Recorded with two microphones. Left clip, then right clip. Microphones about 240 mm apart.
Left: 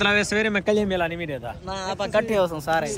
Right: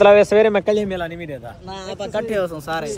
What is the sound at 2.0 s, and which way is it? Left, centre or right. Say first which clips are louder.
Speech: left 1 dB; left.